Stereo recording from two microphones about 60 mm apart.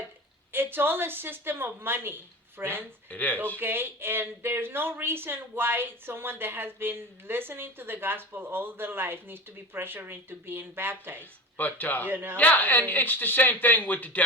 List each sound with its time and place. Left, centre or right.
0.5 s speech: right
3.1 s speech: left
3.6 s speech: right
11.2 s speech: left
12.0 s speech: right
12.4 s speech: left